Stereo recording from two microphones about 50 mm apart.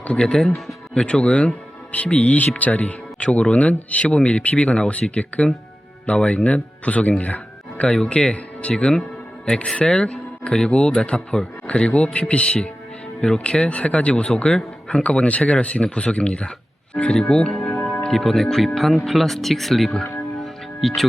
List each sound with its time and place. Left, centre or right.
0.1 s a man's voice: centre
20.4 s music: centre